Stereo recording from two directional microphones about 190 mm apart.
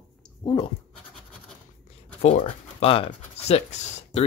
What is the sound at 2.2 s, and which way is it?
Speech, 30° left (ahead or behind).